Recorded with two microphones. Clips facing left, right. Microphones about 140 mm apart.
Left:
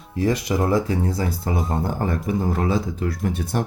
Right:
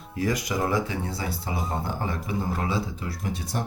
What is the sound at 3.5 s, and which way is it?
Speech, 60° left (ahead or behind).